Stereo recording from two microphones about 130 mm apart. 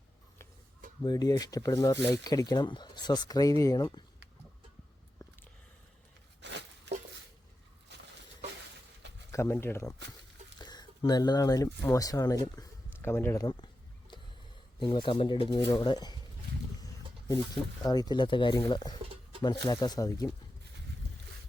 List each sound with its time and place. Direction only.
1.0 s speech: 30° left (ahead or behind)
9.3 s speech: 20° left (ahead or behind)
10.6 s speech: 30° left (ahead or behind)
14.8 s speech: 35° left (ahead or behind)
16.8 s a sound: 30° left (ahead or behind)
17.8 s speech: 30° left (ahead or behind)